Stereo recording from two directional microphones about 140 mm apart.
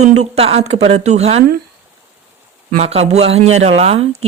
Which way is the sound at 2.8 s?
50° right (ahead or behind).